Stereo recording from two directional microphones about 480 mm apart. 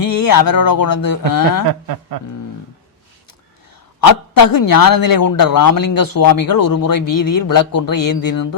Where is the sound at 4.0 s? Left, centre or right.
Left.